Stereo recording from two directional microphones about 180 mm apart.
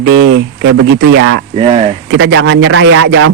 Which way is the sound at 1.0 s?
90° right.